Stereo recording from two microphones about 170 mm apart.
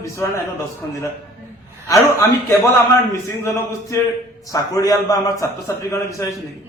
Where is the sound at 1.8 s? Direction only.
20° left (ahead or behind).